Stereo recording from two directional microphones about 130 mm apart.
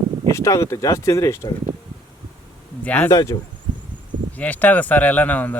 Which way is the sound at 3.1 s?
25° left (ahead or behind).